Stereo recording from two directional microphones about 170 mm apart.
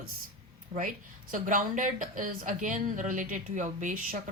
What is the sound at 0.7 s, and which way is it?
Speech, 50° right (ahead or behind).